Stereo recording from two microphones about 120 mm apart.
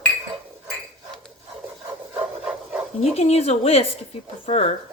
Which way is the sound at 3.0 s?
60° left (ahead or behind).